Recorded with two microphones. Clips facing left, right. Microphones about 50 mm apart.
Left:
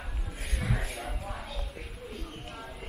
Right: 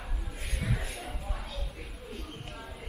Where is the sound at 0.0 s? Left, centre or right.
Centre.